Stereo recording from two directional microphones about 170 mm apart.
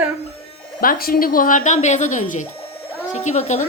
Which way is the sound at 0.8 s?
60° left (ahead or behind).